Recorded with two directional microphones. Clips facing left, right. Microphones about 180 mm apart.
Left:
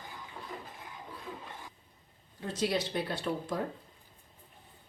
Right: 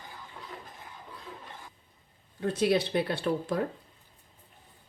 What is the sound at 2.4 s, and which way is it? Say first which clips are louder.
Speech: right 6 dB; 60° right (ahead or behind).